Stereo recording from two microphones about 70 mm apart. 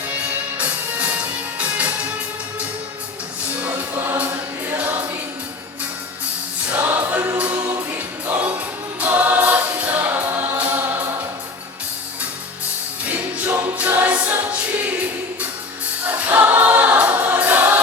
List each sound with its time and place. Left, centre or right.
0.1 s music: right
3.6 s music: right
6.7 s music: right
7.3 s choir: centre
13.7 s music: right
16.0 s choir: right